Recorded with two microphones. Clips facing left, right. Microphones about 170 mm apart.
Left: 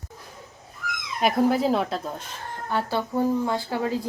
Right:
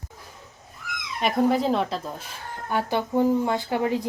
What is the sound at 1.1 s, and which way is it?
Speech, centre (ahead or behind).